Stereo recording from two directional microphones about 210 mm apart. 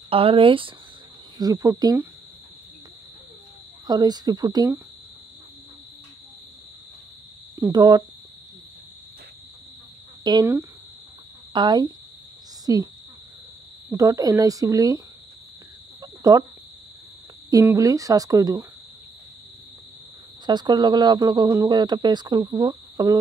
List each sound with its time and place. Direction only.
0.1 s speech: 25° right (ahead or behind)
3.8 s speech: 20° right (ahead or behind)
7.5 s speech: 15° right (ahead or behind)
10.4 s speech: 10° right (ahead or behind)
11.5 s speech: 20° right (ahead or behind)
13.8 s speech: 15° right (ahead or behind)
16.0 s a sound: 15° right (ahead or behind)
17.5 s speech: 15° right (ahead or behind)
20.4 s speech: 20° right (ahead or behind)